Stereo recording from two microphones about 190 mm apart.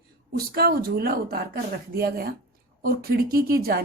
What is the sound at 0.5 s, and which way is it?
Speech, 50° right (ahead or behind).